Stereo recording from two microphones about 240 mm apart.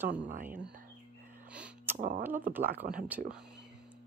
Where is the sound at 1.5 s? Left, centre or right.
Centre.